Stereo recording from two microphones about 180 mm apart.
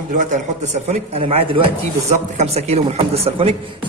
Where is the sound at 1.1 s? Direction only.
35° right (ahead or behind).